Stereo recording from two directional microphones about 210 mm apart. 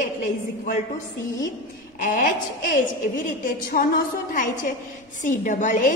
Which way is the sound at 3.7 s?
40° left (ahead or behind).